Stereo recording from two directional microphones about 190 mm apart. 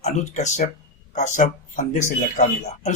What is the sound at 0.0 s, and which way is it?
Speech, 40° left (ahead or behind).